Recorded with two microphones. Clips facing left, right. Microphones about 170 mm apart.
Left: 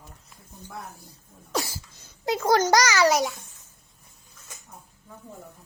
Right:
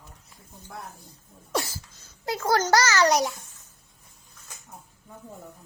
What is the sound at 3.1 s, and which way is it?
Speech, centre (ahead or behind).